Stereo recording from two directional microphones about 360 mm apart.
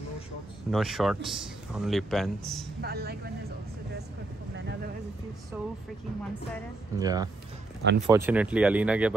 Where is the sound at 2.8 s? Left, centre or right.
Right.